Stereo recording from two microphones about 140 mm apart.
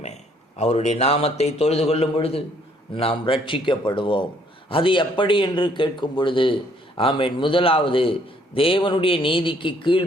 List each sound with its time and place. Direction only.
0.0 s speech: 55° left (ahead or behind)